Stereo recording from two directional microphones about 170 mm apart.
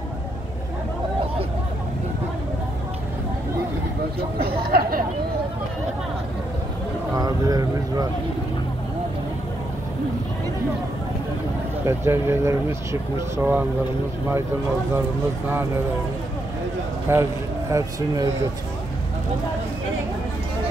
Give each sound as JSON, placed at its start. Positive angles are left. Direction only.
{"t": 4.4, "sound": "chatter", "side_deg": -60}
{"t": 7.2, "sound": "a sound", "side_deg": -20}
{"t": 11.8, "sound": "speech", "side_deg": -15}
{"t": 17.1, "sound": "speech", "side_deg": -15}